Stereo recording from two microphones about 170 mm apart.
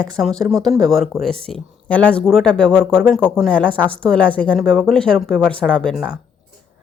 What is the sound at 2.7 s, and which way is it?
Speech, 10° right (ahead or behind).